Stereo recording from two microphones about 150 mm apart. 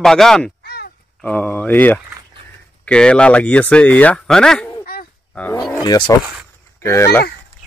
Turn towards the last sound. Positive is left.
turn(degrees=20)  # may be behind; listen again after turning